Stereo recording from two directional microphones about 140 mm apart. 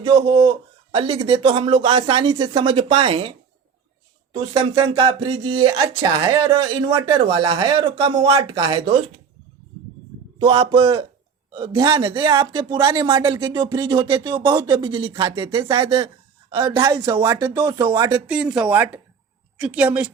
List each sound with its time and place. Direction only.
0.0 s speech: 40° right (ahead or behind)
10.3 s speech: 35° right (ahead or behind)
18.3 s speech: 5° right (ahead or behind)